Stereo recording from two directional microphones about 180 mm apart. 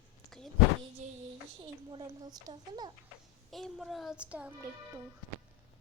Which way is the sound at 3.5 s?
Centre (ahead or behind).